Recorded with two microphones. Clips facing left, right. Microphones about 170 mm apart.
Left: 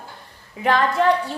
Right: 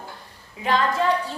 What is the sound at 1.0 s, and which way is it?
Speech, 60° left (ahead or behind).